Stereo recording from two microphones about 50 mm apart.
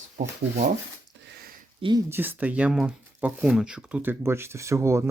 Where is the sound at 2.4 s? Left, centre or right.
Right.